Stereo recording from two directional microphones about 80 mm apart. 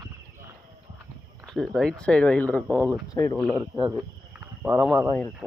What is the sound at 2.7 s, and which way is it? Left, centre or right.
Speech, left.